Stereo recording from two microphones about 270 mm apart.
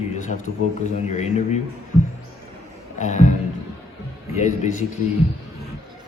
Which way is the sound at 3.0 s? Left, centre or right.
Left.